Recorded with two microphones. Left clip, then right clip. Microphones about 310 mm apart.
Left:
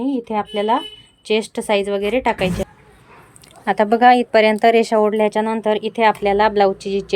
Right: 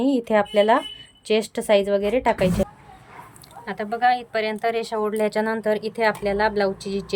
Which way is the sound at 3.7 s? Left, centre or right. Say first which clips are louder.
Left 9 dB; centre.